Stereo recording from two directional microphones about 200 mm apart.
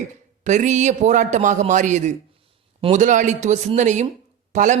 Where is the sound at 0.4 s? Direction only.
35° right (ahead or behind).